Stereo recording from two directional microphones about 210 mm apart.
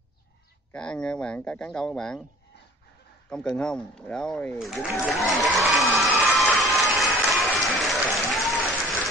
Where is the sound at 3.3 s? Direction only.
5° left (ahead or behind).